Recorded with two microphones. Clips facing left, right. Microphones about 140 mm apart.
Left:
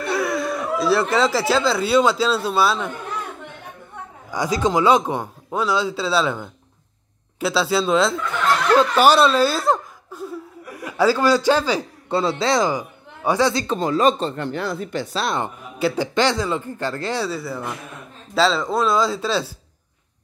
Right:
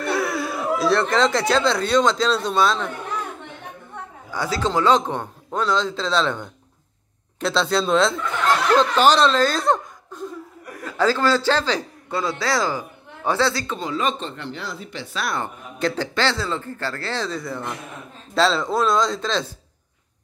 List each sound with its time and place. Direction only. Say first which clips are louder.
0.0 s speech: left 1 dB; centre (ahead or behind)
4.3 s a man's voice: left 3 dB; 15° left (ahead or behind)
8.7 s laughter: left 3 dB; 10° left (ahead or behind)
12.1 s a man's voice: left 4 dB; 25° left (ahead or behind)
13.7 s speech: left 6 dB; 45° left (ahead or behind)
15.1 s speech: left 2 dB; 20° left (ahead or behind)
15.8 s a man's voice: left 3 dB; 10° left (ahead or behind)